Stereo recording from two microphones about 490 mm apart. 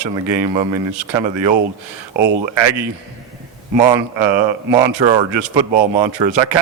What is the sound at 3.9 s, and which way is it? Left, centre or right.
A man's voice, right.